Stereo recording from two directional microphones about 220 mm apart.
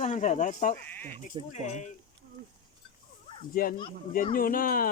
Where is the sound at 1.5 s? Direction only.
35° left (ahead or behind).